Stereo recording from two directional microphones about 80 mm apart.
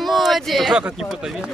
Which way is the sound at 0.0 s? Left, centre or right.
Centre.